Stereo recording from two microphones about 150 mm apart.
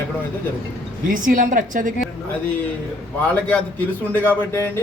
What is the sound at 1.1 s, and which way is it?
Speech, 65° right (ahead or behind).